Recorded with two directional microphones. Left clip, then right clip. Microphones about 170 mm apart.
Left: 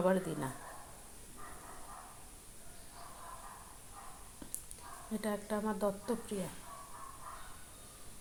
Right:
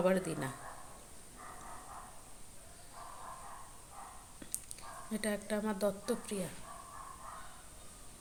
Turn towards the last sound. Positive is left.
turn(degrees=-5)  # may be behind; listen again after turning